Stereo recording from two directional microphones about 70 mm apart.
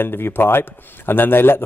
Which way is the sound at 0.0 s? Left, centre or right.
Left.